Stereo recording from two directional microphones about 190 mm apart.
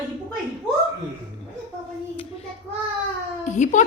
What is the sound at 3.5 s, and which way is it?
Speech, 40° left (ahead or behind).